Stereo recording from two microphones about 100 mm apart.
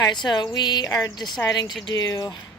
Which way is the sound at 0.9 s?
35° left (ahead or behind).